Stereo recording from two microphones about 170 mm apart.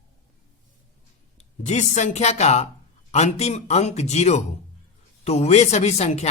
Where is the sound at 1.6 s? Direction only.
45° left (ahead or behind).